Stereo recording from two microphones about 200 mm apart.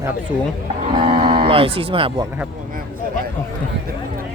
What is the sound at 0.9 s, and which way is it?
Speech, 25° right (ahead or behind).